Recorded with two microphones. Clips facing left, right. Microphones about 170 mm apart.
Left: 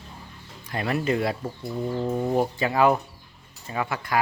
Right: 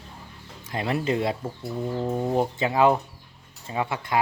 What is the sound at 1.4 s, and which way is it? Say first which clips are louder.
Speech: left 1 dB; 5° right (ahead or behind).